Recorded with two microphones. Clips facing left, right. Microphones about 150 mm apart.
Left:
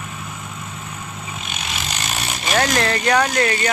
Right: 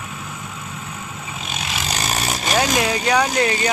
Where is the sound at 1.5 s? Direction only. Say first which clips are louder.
Right 4 dB; 40° right (ahead or behind).